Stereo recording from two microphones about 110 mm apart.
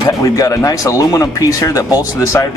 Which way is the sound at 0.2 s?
30° left (ahead or behind).